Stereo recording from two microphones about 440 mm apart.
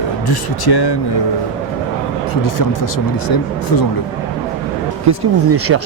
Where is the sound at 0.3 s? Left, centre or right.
Left.